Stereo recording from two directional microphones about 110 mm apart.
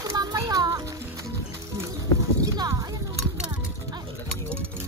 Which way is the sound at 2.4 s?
30° right (ahead or behind).